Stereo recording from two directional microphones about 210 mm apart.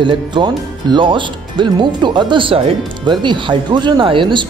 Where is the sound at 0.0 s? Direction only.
20° right (ahead or behind).